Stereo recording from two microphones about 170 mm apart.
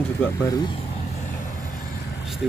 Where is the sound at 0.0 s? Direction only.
10° left (ahead or behind).